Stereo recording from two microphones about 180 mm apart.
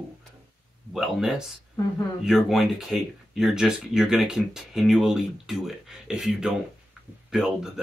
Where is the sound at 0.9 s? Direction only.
Centre (ahead or behind).